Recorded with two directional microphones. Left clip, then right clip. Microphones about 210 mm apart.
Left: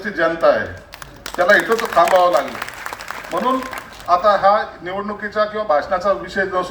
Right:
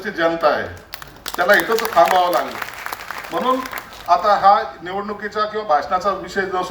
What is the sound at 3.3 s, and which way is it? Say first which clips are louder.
A man's voice: even; 10° right (ahead or behind).